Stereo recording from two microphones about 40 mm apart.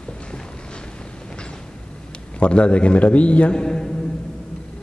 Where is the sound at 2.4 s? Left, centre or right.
Left.